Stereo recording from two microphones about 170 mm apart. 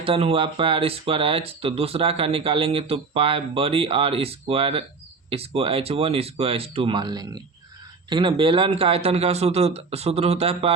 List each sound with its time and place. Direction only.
0.0 s speech: 35° right (ahead or behind)